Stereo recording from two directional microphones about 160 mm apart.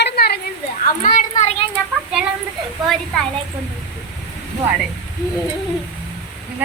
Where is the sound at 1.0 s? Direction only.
50° left (ahead or behind).